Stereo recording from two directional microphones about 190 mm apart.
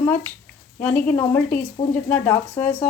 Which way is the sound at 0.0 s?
10° left (ahead or behind).